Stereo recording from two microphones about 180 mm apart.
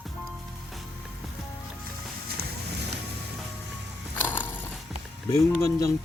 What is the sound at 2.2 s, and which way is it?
Run, 60° right (ahead or behind).